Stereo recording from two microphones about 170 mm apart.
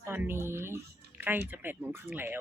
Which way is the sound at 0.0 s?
15° right (ahead or behind).